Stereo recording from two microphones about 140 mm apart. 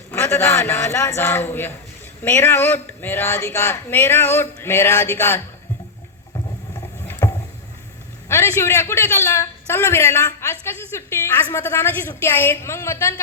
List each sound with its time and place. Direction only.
0.1 s a man's voice: 20° left (ahead or behind)
7.1 s vehicle: 20° left (ahead or behind)
8.3 s a man's voice: 20° left (ahead or behind)